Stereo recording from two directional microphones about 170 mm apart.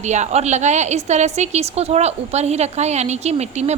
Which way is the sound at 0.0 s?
45° right (ahead or behind).